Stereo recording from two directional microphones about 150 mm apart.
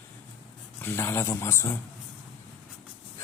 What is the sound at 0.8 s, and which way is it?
Speech, 15° left (ahead or behind).